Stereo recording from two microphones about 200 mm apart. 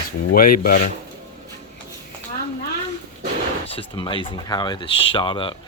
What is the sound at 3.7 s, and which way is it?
Speech, 25° left (ahead or behind).